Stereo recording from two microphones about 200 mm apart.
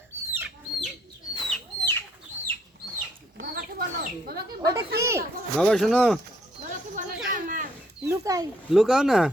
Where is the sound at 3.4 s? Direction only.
45° right (ahead or behind).